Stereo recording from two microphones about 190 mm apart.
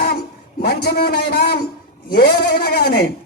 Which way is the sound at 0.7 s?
55° left (ahead or behind).